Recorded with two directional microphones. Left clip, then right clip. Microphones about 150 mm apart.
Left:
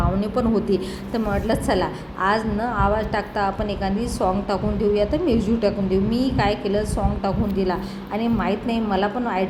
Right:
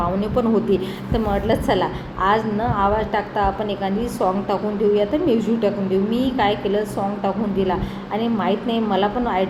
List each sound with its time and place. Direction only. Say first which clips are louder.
0.2 s a woman's voice: right 2 dB; 30° left (ahead or behind)